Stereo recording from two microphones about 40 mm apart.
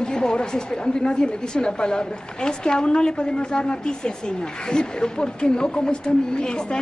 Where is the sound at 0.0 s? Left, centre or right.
Left.